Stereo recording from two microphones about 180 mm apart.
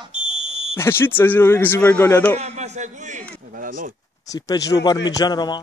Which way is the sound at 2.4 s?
40° right (ahead or behind).